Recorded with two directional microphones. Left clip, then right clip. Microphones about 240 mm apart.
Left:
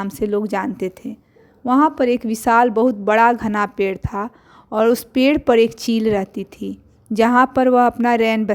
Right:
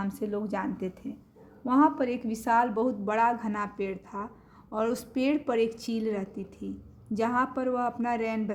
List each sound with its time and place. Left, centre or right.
0.0 s a woman's voice: left